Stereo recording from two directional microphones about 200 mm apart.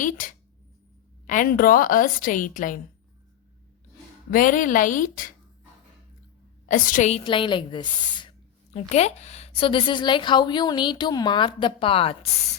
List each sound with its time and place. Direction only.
0.0 s a woman's voice: 40° left (ahead or behind)
4.3 s a woman's voice: 40° left (ahead or behind)
6.7 s a woman's voice: 40° left (ahead or behind)
7.3 s a woman's voice: 25° left (ahead or behind)
8.7 s a woman's voice: 35° left (ahead or behind)